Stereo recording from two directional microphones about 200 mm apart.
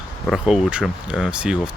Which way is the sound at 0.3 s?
5° right (ahead or behind).